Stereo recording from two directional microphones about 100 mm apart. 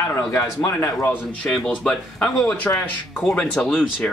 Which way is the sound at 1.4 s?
5° left (ahead or behind).